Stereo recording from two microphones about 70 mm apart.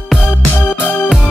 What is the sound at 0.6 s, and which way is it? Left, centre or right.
Music, left.